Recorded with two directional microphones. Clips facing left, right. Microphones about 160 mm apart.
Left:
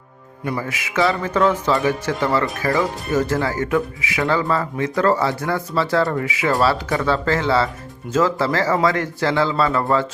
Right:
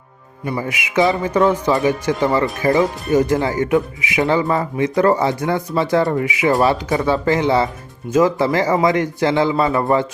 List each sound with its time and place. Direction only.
0.5 s speech: 20° right (ahead or behind)